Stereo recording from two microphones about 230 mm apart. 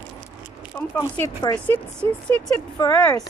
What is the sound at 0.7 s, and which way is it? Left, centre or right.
Speech, centre.